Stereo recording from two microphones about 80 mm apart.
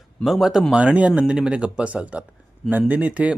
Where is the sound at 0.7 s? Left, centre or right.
Centre.